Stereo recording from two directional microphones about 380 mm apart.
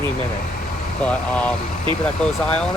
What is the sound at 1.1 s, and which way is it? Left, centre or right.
Speech, centre.